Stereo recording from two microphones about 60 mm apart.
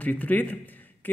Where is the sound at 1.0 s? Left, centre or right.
Left.